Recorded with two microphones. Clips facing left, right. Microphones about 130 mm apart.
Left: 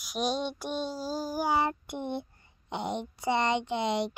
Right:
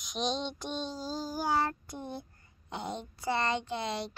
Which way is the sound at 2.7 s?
20° left (ahead or behind).